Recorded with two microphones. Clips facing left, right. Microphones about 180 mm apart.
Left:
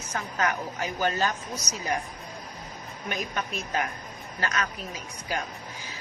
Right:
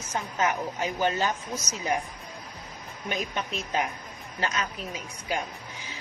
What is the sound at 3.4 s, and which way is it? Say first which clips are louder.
Speech: even; 25° right (ahead or behind).